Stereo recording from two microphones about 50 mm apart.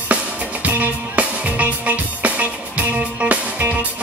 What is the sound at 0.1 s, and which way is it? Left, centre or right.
Music, right.